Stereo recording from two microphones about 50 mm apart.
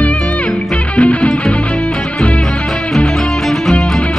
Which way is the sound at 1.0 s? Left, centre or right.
Left.